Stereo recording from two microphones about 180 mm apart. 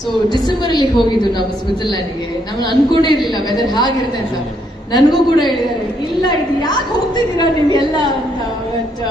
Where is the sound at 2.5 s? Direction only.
25° left (ahead or behind).